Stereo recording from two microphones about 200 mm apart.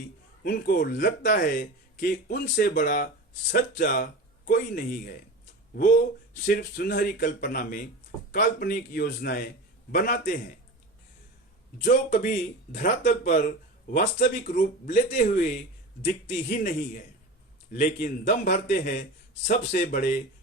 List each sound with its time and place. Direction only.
0.4 s speech: 45° left (ahead or behind)
6.4 s speech: 45° left (ahead or behind)
12.2 s speech: 45° left (ahead or behind)